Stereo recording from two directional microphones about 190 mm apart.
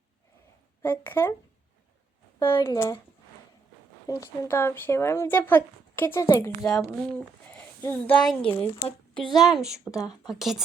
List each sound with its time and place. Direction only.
0.8 s speech: 10° left (ahead or behind)
2.4 s speech: 15° left (ahead or behind)
4.0 s speech: 15° left (ahead or behind)
9.1 s a woman's voice: 25° left (ahead or behind)
9.4 s speech: centre (ahead or behind)